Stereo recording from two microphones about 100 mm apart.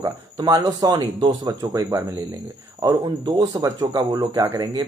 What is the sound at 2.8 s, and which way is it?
Speech, 45° right (ahead or behind).